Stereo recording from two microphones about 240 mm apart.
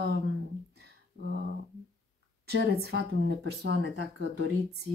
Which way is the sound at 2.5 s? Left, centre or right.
Right.